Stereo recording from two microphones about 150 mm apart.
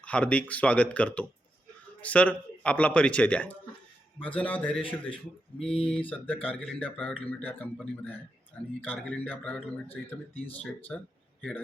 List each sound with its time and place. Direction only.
0.0 s speech: 10° left (ahead or behind)
4.8 s speech: 35° left (ahead or behind)
6.1 s a man's voice: 10° left (ahead or behind)